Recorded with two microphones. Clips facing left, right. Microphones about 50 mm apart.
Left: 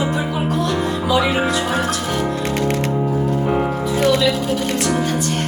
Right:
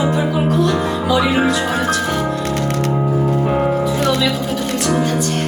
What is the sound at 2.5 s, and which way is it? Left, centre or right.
Music, centre.